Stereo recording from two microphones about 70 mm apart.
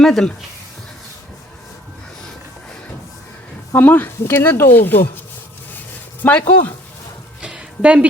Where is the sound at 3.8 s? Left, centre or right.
Left.